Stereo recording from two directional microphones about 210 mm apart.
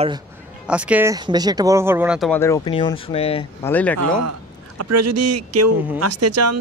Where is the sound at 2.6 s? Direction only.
25° left (ahead or behind).